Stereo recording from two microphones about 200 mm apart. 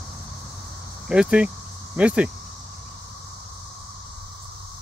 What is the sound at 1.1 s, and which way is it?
Speech, 5° right (ahead or behind).